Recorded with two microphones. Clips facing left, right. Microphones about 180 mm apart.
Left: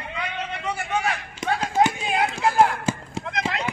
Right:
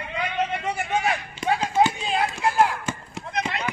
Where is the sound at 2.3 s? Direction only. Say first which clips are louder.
Left 3 dB; 30° left (ahead or behind).